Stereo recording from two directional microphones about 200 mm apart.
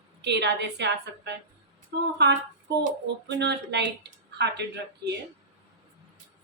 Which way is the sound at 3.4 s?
60° right (ahead or behind).